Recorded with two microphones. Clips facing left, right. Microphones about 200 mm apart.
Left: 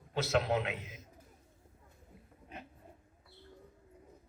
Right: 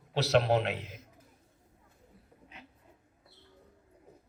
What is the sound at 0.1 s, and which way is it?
Speech, 70° right (ahead or behind).